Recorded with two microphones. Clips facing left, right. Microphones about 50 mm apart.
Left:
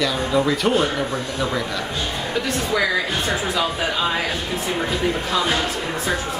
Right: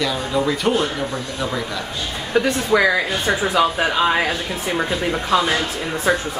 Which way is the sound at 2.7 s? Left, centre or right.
Right.